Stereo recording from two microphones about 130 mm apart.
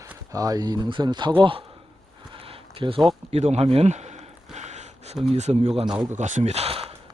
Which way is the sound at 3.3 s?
55° right (ahead or behind).